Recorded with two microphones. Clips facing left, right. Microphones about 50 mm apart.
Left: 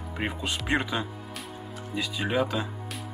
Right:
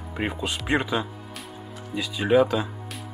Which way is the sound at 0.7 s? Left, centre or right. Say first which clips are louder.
Right 3 dB; centre.